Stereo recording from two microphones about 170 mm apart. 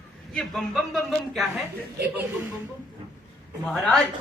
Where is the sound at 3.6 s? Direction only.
Centre (ahead or behind).